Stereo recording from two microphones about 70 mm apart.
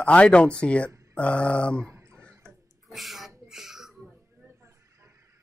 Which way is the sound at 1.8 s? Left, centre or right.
Right.